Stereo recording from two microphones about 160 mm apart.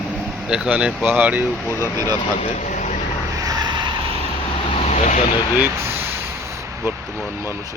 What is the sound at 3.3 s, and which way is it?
Vehicle, 20° right (ahead or behind).